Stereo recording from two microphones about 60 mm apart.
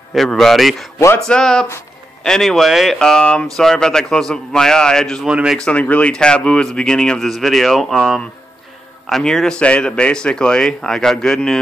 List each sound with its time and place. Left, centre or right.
0.3 s speech: centre
3.0 s speech: centre
7.2 s speech: centre
9.2 s speech: centre